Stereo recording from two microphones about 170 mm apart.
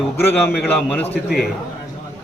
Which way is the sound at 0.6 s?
10° left (ahead or behind).